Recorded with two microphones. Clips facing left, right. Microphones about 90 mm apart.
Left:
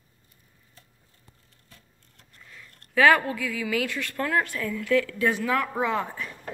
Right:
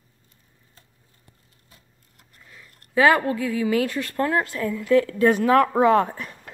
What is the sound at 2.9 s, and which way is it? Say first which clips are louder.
A woman's voice: right 2 dB; 30° right (ahead or behind).